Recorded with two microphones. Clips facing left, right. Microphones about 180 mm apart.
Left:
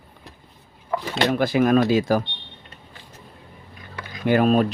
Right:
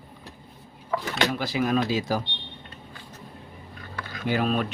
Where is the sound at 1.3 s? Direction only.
55° left (ahead or behind).